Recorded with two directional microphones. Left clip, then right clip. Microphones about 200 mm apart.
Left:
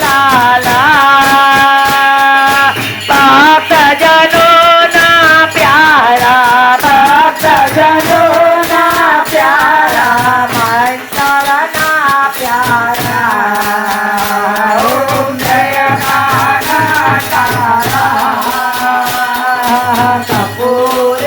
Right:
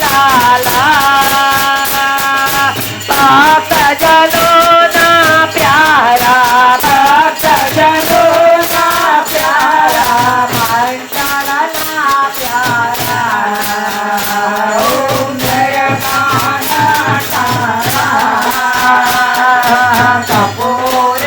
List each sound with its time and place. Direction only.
0.8 s music: 55° left (ahead or behind)